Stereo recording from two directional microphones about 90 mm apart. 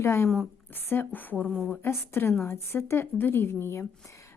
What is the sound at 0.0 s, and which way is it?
A woman's voice, 30° left (ahead or behind).